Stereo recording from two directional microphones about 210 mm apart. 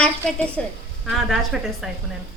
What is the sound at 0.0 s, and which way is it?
Speech, 5° left (ahead or behind).